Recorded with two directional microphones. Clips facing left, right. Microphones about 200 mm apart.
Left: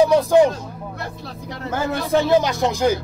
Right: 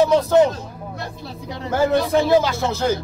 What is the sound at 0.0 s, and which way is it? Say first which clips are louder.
Speech: left 1 dB; 10° left (ahead or behind).